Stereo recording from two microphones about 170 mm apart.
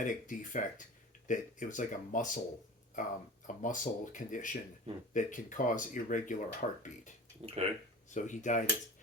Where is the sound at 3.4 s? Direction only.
50° left (ahead or behind).